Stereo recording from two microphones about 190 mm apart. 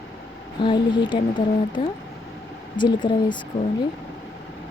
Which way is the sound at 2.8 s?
25° left (ahead or behind).